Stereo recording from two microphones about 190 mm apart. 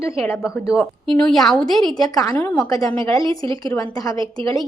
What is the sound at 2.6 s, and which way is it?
Speech, 20° left (ahead or behind).